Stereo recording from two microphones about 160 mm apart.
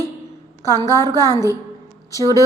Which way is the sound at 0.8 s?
20° left (ahead or behind).